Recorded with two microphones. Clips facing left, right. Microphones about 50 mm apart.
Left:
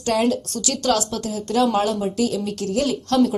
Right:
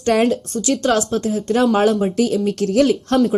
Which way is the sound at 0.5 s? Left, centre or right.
Right.